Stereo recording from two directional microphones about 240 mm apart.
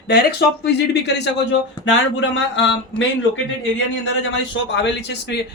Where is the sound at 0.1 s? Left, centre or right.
Left.